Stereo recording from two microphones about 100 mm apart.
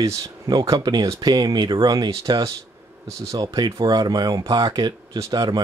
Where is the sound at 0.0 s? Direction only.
35° right (ahead or behind).